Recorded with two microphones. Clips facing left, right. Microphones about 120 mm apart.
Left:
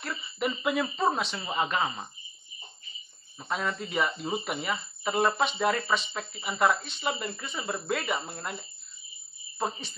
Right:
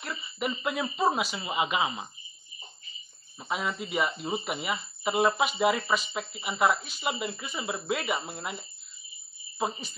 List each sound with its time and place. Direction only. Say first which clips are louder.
0.0 s speech: left 2 dB; centre (ahead or behind)
3.3 s speech: even; 5° right (ahead or behind)